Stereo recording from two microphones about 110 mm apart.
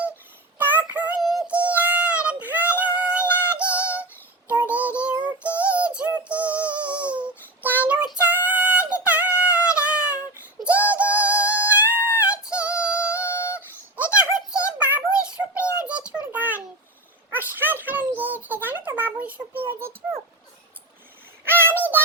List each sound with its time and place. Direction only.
0.6 s synthetic singing: 15° right (ahead or behind)
1.2 s synthetic singing: centre (ahead or behind)
1.5 s synthetic singing: 15° right (ahead or behind)
4.4 s child singing: 15° right (ahead or behind)
5.4 s synthetic singing: 15° right (ahead or behind)
8.4 s female singing: 15° right (ahead or behind)
9.4 s synthetic singing: 10° right (ahead or behind)
11.4 s music: 15° right (ahead or behind)
12.2 s yodeling: 10° right (ahead or behind)
13.2 s a sound: 25° left (ahead or behind)
13.9 s a sound: 15° right (ahead or behind)
21.4 s a sound: 20° right (ahead or behind)